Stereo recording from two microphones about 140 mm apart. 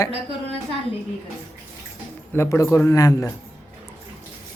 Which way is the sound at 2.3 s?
20° left (ahead or behind).